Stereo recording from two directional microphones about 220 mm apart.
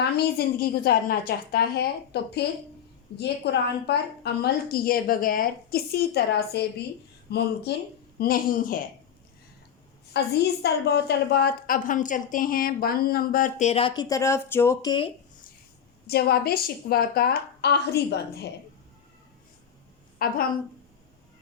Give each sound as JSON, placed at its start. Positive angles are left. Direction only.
{"t": 0.0, "sound": "a woman's voice", "side_deg": 45}
{"t": 10.1, "sound": "a woman's voice", "side_deg": 50}
{"t": 16.0, "sound": "a woman's voice", "side_deg": 45}
{"t": 20.2, "sound": "a woman's voice", "side_deg": 40}